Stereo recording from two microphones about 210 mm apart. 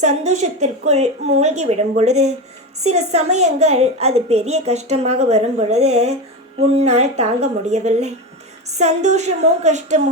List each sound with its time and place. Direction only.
0.0 s a woman's voice: 35° right (ahead or behind)